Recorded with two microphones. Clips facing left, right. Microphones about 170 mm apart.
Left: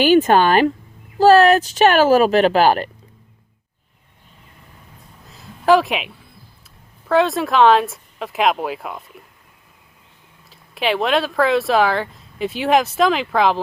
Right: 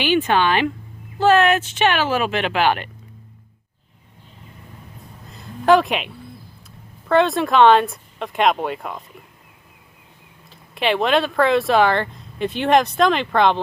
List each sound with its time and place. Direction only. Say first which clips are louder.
0.0 s speech: left 5 dB; 40° left (ahead or behind)
5.3 s a sound: even; centre (ahead or behind)
7.1 s speech: even; centre (ahead or behind)
10.5 s speech: even; centre (ahead or behind)